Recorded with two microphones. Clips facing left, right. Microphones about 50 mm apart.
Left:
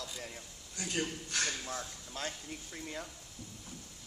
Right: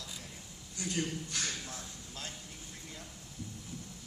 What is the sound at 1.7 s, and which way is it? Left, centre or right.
Speech, left.